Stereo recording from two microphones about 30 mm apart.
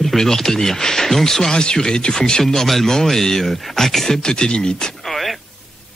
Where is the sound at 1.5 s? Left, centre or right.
Left.